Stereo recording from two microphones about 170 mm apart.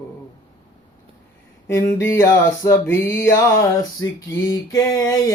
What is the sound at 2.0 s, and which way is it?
Music, 20° left (ahead or behind).